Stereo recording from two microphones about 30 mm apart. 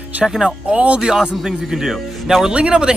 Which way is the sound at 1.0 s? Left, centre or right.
Right.